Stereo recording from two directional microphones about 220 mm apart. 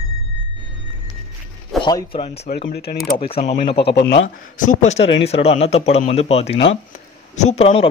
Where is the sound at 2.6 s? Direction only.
45° left (ahead or behind).